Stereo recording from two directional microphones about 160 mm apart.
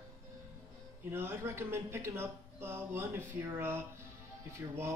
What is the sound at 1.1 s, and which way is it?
Speech, 15° right (ahead or behind).